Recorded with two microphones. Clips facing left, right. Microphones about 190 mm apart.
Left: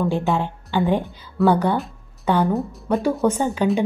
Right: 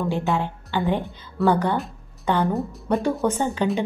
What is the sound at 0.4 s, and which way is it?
A woman's voice, 15° left (ahead or behind).